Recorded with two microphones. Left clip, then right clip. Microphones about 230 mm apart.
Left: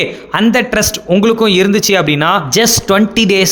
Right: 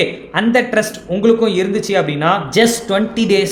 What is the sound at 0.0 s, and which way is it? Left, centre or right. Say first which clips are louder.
Speech: left 3 dB; left.